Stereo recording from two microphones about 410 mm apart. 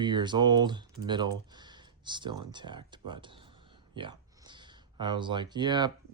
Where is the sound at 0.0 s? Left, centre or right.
Centre.